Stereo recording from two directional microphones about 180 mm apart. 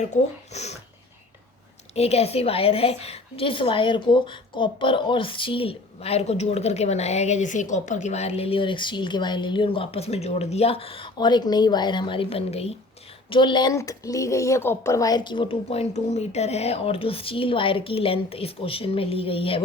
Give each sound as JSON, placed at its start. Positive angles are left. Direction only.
{"t": 0.0, "sound": "a woman's voice", "side_deg": 40}
{"t": 2.0, "sound": "a woman's voice", "side_deg": 35}